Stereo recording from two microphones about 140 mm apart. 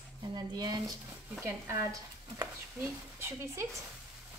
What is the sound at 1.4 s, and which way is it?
Speech, 20° right (ahead or behind).